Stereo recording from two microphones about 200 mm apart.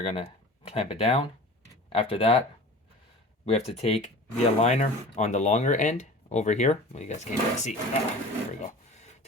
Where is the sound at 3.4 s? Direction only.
30° left (ahead or behind).